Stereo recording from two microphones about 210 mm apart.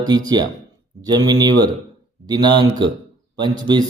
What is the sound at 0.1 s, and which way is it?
A man's voice, 20° right (ahead or behind).